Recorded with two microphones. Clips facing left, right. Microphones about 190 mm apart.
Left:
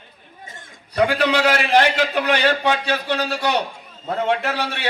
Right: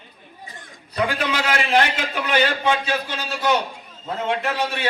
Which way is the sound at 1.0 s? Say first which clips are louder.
Left 5 dB; 70° left (ahead or behind).